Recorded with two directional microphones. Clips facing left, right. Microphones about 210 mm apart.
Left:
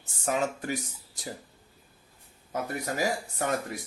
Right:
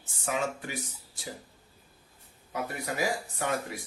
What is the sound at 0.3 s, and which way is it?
Speech, 40° left (ahead or behind).